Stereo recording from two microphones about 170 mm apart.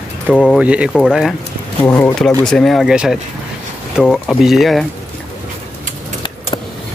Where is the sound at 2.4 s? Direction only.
Centre (ahead or behind).